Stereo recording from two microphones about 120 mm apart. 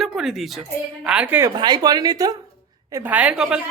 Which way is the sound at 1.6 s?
40° right (ahead or behind).